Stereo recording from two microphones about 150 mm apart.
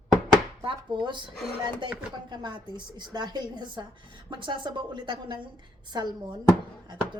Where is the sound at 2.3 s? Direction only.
30° right (ahead or behind).